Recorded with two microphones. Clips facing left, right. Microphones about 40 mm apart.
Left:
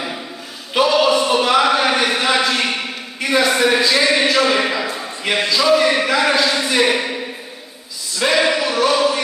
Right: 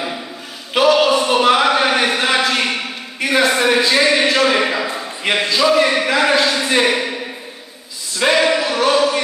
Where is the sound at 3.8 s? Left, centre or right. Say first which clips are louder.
Right 1 dB; right.